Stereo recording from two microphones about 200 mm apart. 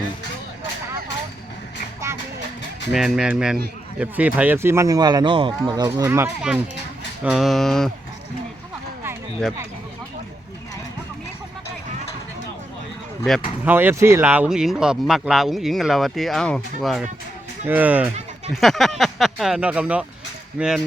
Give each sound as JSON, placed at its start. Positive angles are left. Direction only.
{"t": 2.9, "sound": "speech", "side_deg": 0}
{"t": 13.7, "sound": "speech", "side_deg": -10}